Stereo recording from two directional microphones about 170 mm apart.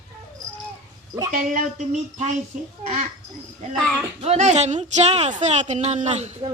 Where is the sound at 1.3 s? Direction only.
50° right (ahead or behind).